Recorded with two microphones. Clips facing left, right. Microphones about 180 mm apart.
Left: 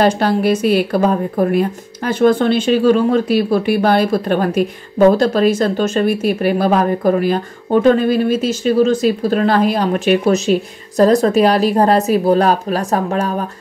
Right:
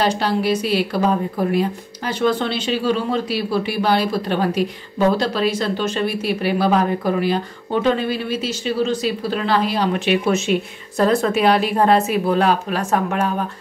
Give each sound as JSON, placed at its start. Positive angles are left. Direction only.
{"t": 0.0, "sound": "a woman's voice", "side_deg": 50}